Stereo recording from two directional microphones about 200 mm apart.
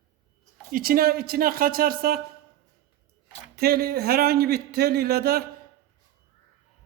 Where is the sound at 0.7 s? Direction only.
45° right (ahead or behind).